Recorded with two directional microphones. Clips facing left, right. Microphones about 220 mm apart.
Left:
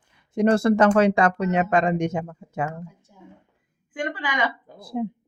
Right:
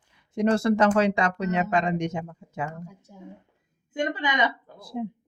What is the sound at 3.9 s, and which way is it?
Speech, 25° right (ahead or behind).